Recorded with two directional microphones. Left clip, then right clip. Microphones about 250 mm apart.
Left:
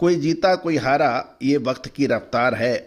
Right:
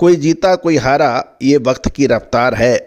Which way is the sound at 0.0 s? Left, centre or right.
Right.